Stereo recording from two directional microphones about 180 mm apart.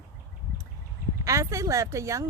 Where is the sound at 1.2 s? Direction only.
15° right (ahead or behind).